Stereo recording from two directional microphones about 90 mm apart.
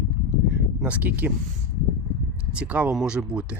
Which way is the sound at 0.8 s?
15° right (ahead or behind).